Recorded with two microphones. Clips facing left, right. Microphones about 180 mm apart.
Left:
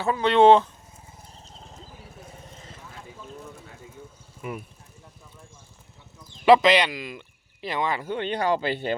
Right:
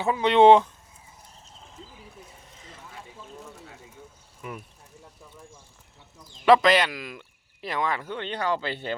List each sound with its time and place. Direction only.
0.0 s speech: 15° right (ahead or behind)
4.4 s speech: 10° left (ahead or behind)
6.4 s speech: centre (ahead or behind)
8.0 s speech: 15° left (ahead or behind)